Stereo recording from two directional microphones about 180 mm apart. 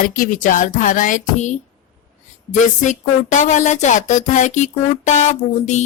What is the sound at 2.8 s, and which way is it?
Speech, 45° left (ahead or behind).